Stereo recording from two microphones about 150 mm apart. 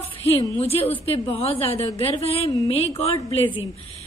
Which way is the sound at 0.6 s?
40° left (ahead or behind).